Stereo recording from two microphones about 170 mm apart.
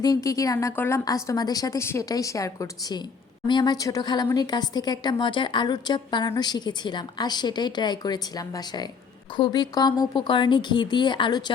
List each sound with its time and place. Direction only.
0.0 s a woman's voice: 20° left (ahead or behind)